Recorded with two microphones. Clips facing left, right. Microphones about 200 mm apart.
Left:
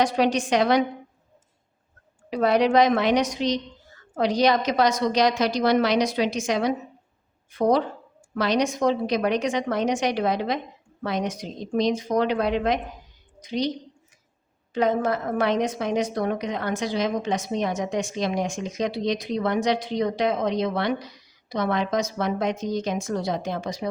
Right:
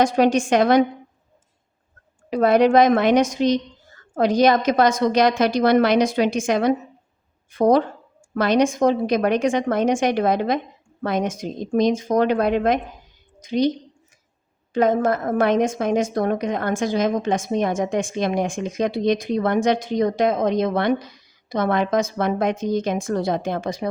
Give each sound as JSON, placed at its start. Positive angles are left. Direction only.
{"t": 0.0, "sound": "a woman's voice", "side_deg": -50}
{"t": 2.3, "sound": "a woman's voice", "side_deg": -50}